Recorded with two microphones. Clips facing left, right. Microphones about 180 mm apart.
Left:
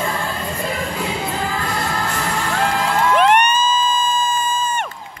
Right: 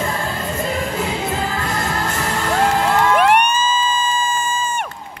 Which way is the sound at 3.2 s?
10° right (ahead or behind).